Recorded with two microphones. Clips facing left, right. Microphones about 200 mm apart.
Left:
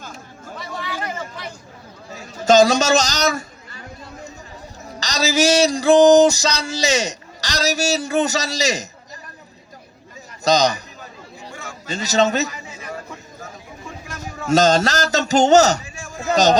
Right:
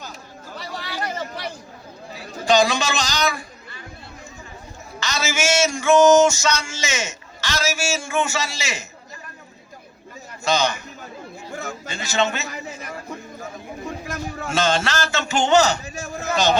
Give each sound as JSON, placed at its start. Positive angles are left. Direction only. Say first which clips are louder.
{"t": 2.1, "sound": "a sound", "louder": "left 5 dB", "side_deg": 45}
{"t": 4.9, "sound": "music", "louder": "left 6 dB", "side_deg": 35}
{"t": 10.4, "sound": "music", "louder": "left 5 dB", "side_deg": 40}
{"t": 11.5, "sound": "chatter", "louder": "right 6 dB", "side_deg": -40}
{"t": 11.9, "sound": "music", "louder": "left 5 dB", "side_deg": 40}
{"t": 14.4, "sound": "music", "louder": "left 7 dB", "side_deg": 40}
{"t": 15.8, "sound": "a sound", "louder": "right 4 dB", "side_deg": -40}
{"t": 16.3, "sound": "a man's voice", "louder": "left 5 dB", "side_deg": 40}